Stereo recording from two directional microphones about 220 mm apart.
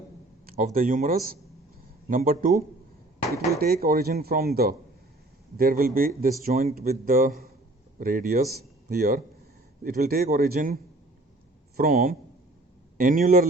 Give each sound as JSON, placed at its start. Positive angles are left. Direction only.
{"t": 0.4, "sound": "a man's voice", "side_deg": -40}
{"t": 3.6, "sound": "a man's voice", "side_deg": -45}
{"t": 11.8, "sound": "a man's voice", "side_deg": -40}